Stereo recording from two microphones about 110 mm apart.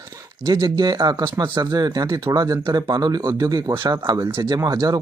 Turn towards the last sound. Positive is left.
turn(degrees=-35)  # may be behind; listen again after turning